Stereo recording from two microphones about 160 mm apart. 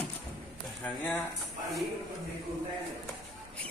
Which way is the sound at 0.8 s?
10° left (ahead or behind).